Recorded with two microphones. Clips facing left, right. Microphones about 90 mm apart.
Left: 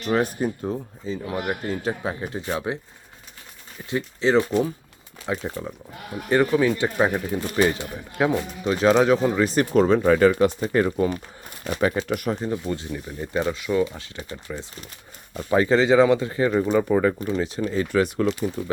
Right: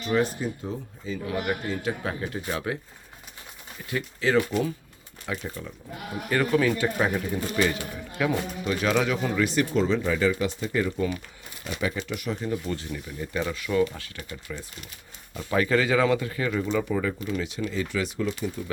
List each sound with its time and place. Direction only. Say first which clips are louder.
0.0 s speech: left 3 dB; 55° left (ahead or behind)
1.0 s speech: left 1 dB; 30° left (ahead or behind)
2.0 s speech: left 3 dB; 20° left (ahead or behind)
3.8 s speech: left 4 dB; 25° left (ahead or behind)
9.5 s speech: left 5 dB; 45° left (ahead or behind)
12.4 s speech: left 3 dB; 25° left (ahead or behind); by 18.7 s 45° left (ahead or behind)